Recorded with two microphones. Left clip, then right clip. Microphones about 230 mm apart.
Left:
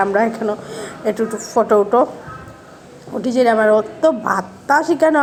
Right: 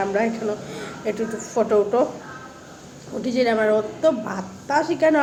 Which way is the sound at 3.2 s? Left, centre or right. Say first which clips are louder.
Left 6 dB; centre.